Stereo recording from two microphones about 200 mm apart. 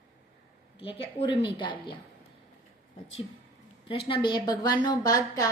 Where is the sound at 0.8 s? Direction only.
25° left (ahead or behind).